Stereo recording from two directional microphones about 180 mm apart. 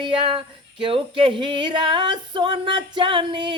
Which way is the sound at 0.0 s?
30° right (ahead or behind).